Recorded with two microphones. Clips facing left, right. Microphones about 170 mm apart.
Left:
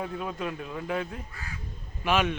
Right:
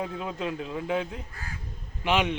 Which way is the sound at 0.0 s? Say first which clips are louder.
Right 1 dB; 20° right (ahead or behind).